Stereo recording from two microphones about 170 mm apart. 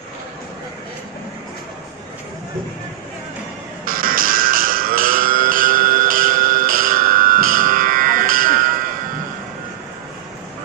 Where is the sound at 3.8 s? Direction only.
55° right (ahead or behind).